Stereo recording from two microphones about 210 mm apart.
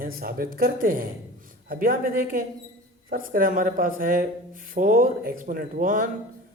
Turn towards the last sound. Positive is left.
turn(degrees=-40)  # may be behind; listen again after turning